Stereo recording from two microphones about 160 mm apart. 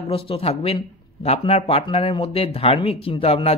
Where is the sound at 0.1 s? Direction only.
35° left (ahead or behind).